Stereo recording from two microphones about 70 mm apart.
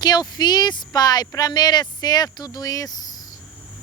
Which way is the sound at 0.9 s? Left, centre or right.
Left.